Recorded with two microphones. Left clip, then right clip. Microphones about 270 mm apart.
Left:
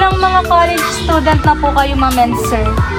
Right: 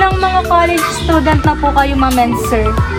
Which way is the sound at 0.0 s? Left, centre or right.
Centre.